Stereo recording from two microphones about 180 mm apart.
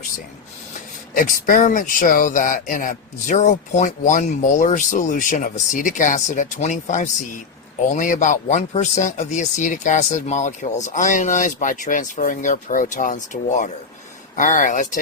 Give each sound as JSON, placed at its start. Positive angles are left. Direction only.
{"t": 1.1, "sound": "speech", "side_deg": 50}